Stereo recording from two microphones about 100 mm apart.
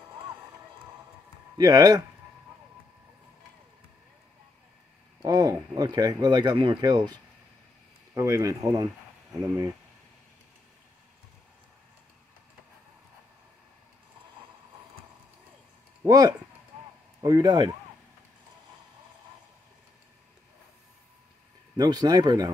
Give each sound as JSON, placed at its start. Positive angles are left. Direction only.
{"t": 1.6, "sound": "speech", "side_deg": -40}
{"t": 5.2, "sound": "speech", "side_deg": -40}
{"t": 6.8, "sound": "speech", "side_deg": -40}
{"t": 8.1, "sound": "speech", "side_deg": -30}
{"t": 16.1, "sound": "speech", "side_deg": -40}
{"t": 21.7, "sound": "speech", "side_deg": -40}